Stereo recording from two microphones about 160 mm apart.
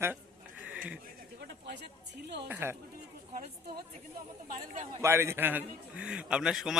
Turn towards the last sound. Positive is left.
turn(degrees=-5)  # may be behind; listen again after turning